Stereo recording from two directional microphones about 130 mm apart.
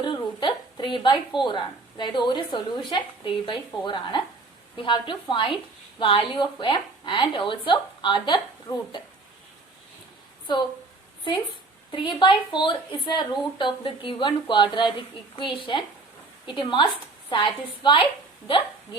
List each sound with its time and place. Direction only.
0.0 s a woman's voice: 35° left (ahead or behind)
11.9 s a woman's voice: 35° left (ahead or behind)